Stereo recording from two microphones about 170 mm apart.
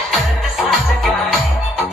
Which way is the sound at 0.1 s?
Centre (ahead or behind).